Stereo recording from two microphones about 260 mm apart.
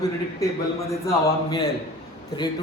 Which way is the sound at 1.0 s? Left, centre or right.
Centre.